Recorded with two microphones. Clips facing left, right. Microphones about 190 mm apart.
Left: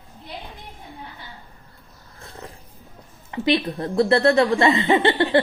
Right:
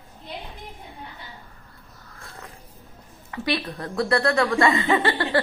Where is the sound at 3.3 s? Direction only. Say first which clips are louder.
Left 6 dB; 25° left (ahead or behind).